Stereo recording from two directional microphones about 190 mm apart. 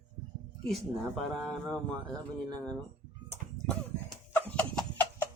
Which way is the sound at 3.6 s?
20° right (ahead or behind).